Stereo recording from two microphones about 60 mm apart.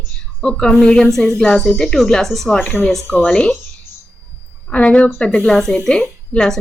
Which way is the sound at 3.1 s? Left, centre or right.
Left.